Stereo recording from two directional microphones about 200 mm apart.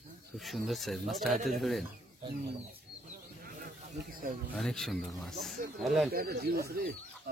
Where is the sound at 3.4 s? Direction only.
45° right (ahead or behind).